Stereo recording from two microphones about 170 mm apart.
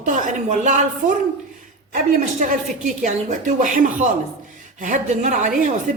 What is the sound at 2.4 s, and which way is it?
A woman's voice, 50° right (ahead or behind).